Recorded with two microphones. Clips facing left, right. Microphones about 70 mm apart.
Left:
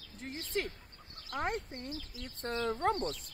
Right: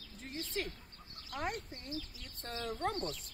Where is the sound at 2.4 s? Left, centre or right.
Left.